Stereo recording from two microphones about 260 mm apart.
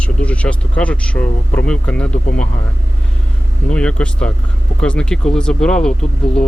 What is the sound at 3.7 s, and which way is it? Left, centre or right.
Speech, centre.